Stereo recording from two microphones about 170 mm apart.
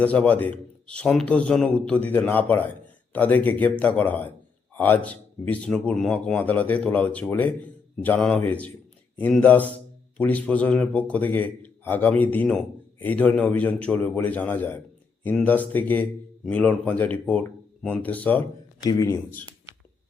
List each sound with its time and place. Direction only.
0.0 s a man's voice: 10° left (ahead or behind)
18.8 s speech: 20° left (ahead or behind)